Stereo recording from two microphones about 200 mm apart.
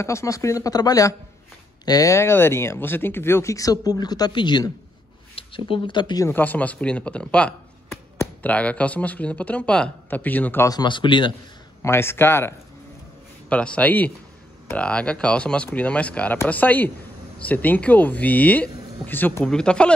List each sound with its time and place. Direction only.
0.0 s speech: 15° left (ahead or behind)
11.8 s speech: 10° left (ahead or behind)